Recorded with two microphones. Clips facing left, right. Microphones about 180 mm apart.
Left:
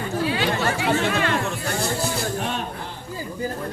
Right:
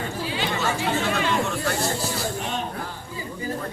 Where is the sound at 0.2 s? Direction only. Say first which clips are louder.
Left 5 dB; 65° left (ahead or behind).